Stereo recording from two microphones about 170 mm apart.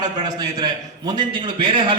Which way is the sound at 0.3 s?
25° right (ahead or behind).